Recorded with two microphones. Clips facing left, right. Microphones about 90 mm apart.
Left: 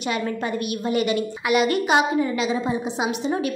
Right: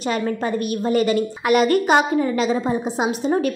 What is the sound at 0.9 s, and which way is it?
A woman's voice, 40° right (ahead or behind).